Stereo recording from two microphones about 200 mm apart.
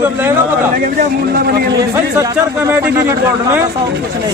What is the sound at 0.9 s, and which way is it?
Speech, 50° right (ahead or behind).